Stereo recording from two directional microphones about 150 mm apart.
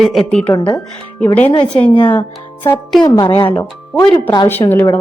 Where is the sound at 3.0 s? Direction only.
25° left (ahead or behind).